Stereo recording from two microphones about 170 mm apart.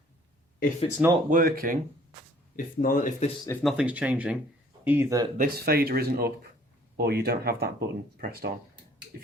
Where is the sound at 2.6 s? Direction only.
55° left (ahead or behind).